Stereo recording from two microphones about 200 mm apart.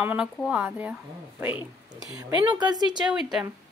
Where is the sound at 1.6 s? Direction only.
20° left (ahead or behind).